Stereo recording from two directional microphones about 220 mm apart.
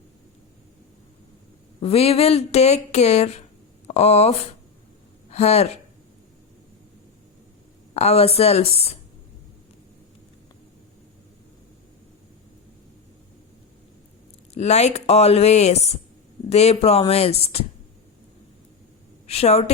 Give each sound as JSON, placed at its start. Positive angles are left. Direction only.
{"t": 1.8, "sound": "speech", "side_deg": 25}
{"t": 7.9, "sound": "speech", "side_deg": 30}
{"t": 14.5, "sound": "speech", "side_deg": 30}
{"t": 19.3, "sound": "speech", "side_deg": 30}